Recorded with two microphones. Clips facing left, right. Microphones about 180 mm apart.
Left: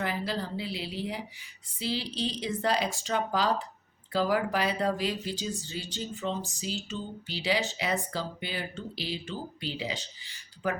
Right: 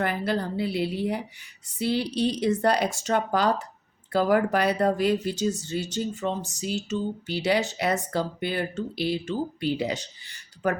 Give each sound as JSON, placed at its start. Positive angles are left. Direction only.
{"t": 0.0, "sound": "speech", "side_deg": -55}